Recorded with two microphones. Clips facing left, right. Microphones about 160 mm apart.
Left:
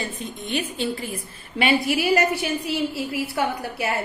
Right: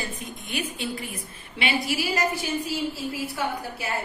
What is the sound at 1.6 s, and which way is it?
A woman's voice, 55° left (ahead or behind).